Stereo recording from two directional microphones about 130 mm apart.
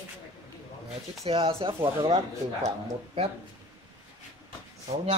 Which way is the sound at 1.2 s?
45° right (ahead or behind).